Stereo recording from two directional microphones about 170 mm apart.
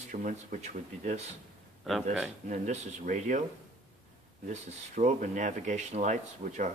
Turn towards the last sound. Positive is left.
turn(degrees=-45)  # may be behind; listen again after turning